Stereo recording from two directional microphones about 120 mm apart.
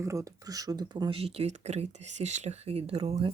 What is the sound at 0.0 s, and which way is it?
Speech, 25° right (ahead or behind).